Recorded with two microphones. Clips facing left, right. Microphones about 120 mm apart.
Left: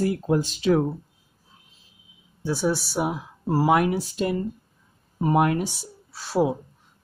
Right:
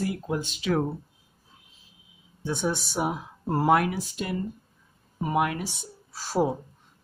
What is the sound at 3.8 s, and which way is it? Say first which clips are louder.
Speech: left 6 dB; 30° left (ahead or behind).